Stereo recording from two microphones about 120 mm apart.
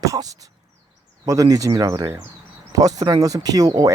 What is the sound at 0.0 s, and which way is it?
Speech, 30° right (ahead or behind).